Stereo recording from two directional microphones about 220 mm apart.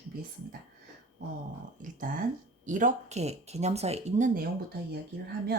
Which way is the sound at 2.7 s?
35° right (ahead or behind).